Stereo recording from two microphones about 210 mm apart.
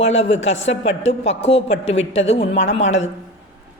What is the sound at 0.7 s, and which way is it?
Speech, 60° left (ahead or behind).